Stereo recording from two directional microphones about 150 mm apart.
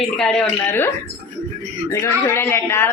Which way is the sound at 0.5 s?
15° left (ahead or behind).